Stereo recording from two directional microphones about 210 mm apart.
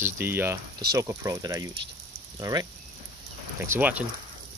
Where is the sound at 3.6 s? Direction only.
10° right (ahead or behind).